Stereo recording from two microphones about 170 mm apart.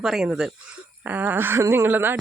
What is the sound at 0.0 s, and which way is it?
Speech, 5° right (ahead or behind).